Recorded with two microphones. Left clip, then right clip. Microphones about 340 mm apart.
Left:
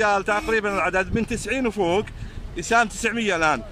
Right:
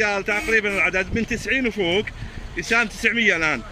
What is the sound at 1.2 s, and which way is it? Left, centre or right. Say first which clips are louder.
A man's voice: right 3 dB; centre.